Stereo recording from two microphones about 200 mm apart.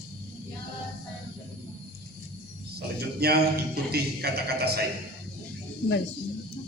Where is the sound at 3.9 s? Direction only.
55° right (ahead or behind).